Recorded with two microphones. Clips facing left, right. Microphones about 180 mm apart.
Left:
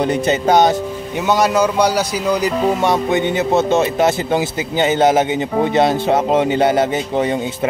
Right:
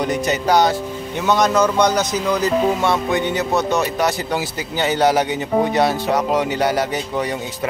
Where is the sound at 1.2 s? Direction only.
10° left (ahead or behind).